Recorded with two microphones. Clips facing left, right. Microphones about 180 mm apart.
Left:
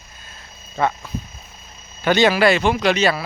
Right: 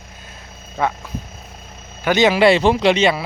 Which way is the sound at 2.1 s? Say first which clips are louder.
Right 2 dB; 20° right (ahead or behind).